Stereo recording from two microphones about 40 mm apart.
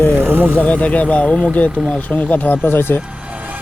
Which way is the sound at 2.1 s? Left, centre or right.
Left.